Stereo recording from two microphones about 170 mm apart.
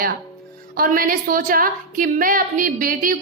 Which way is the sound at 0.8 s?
55° right (ahead or behind).